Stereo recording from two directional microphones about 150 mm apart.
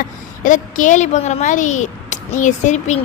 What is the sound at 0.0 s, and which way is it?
A woman's voice, 60° left (ahead or behind).